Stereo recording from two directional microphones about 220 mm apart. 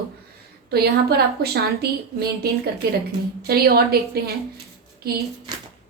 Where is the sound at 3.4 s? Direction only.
45° right (ahead or behind).